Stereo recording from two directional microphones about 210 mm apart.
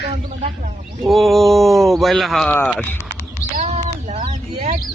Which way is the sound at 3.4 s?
40° left (ahead or behind).